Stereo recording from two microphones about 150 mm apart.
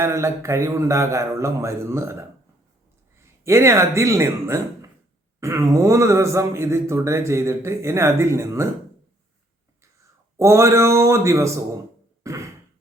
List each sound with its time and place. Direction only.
0.0 s speech: 20° right (ahead or behind)
9.8 s speech: 20° right (ahead or behind)
12.2 s throat clearing: 20° right (ahead or behind)